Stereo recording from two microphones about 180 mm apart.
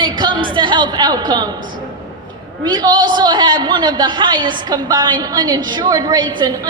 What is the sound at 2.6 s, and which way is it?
A man's voice, 25° right (ahead or behind).